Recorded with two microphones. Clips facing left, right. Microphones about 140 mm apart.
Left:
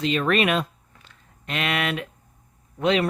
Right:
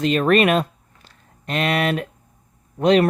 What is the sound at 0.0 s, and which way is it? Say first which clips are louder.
Speech: right 5 dB; 45° right (ahead or behind).